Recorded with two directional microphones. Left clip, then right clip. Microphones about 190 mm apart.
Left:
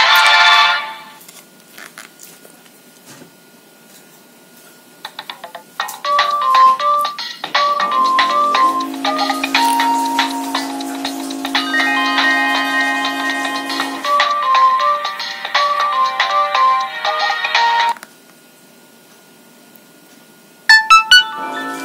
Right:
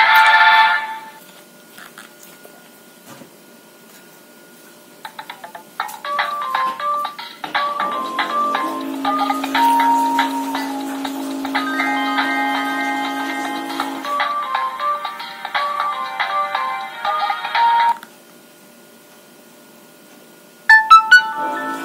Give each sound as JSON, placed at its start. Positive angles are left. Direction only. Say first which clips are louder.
{"t": 0.0, "sound": "music", "louder": "left 1 dB", "side_deg": 40}
{"t": 5.0, "sound": "music", "louder": "left 3 dB", "side_deg": 40}
{"t": 20.6, "sound": "music", "louder": "even", "side_deg": 40}